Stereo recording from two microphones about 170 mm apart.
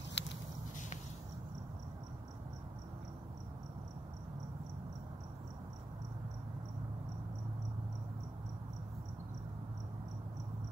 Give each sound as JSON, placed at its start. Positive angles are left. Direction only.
{"t": 0.2, "sound": "walk", "side_deg": 90}